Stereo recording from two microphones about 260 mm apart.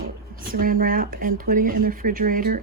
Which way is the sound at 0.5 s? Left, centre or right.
Right.